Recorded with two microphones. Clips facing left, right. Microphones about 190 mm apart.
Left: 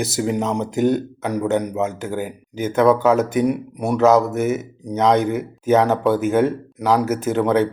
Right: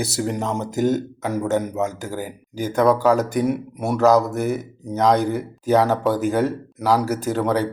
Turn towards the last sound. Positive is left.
turn(degrees=0)  # may be behind; listen again after turning